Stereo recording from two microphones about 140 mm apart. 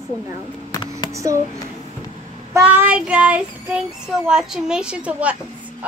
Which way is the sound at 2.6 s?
10° right (ahead or behind).